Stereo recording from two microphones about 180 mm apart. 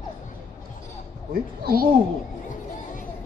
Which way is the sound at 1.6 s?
55° right (ahead or behind).